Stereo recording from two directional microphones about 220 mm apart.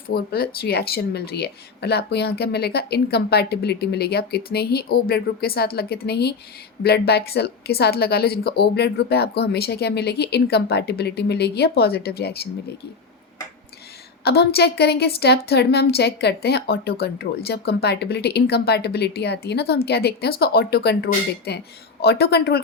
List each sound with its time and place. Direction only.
0.1 s a woman's voice: 45° left (ahead or behind)
14.3 s a woman's voice: 45° left (ahead or behind)